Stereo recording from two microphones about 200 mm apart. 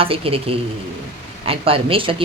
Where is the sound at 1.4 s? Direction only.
30° right (ahead or behind).